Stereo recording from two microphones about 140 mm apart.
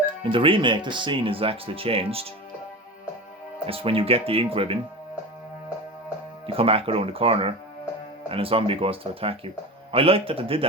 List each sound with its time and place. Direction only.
0.2 s speech: 40° right (ahead or behind)
3.7 s speech: 40° right (ahead or behind)
6.5 s speech: 45° right (ahead or behind)